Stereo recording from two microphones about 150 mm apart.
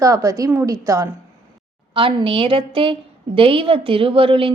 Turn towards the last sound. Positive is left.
turn(degrees=-35)  # may be behind; listen again after turning